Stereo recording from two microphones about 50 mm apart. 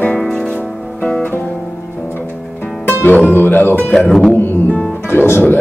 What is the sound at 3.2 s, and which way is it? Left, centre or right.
Speech, left.